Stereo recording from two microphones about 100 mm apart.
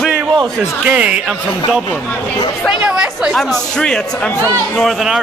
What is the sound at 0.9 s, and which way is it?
Speech, 10° right (ahead or behind).